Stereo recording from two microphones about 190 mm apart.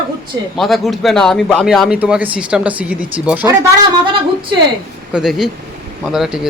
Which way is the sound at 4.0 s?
25° right (ahead or behind).